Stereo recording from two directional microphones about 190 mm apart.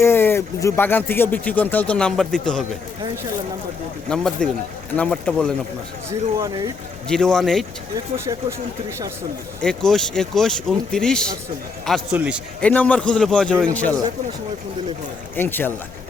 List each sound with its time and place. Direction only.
0.0 s speech: 10° left (ahead or behind)
4.1 s speech: centre (ahead or behind)
6.1 s speech: 20° right (ahead or behind)
7.1 s speech: 5° left (ahead or behind)
7.9 s speech: 15° right (ahead or behind)
9.6 s speech: 5° left (ahead or behind)
12.5 s speech: 5° left (ahead or behind)
15.4 s speech: 10° left (ahead or behind)